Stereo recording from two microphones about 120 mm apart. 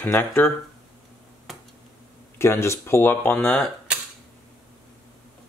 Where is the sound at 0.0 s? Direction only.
20° left (ahead or behind).